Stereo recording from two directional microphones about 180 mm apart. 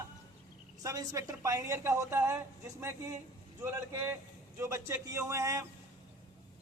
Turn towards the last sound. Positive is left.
turn(degrees=-15)  # may be behind; listen again after turning